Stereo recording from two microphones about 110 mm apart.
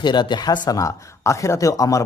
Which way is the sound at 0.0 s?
45° left (ahead or behind).